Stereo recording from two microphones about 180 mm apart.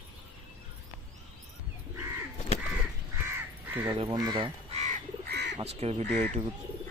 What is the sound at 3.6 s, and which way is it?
Crow, 10° right (ahead or behind).